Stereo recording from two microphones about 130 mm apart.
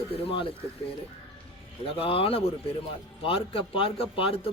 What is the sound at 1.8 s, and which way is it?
A man's voice, 45° left (ahead or behind).